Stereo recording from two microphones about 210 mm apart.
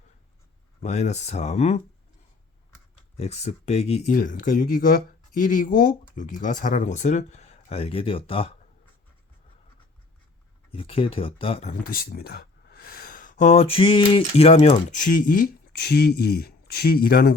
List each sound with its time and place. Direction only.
0.8 s speech: 30° left (ahead or behind)
3.2 s speech: 30° left (ahead or behind)
10.7 s speech: 25° left (ahead or behind); by 17.3 s 45° left (ahead or behind)